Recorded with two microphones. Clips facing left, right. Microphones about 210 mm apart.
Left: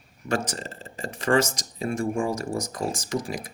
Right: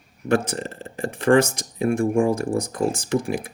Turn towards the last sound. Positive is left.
turn(degrees=-55)  # may be behind; listen again after turning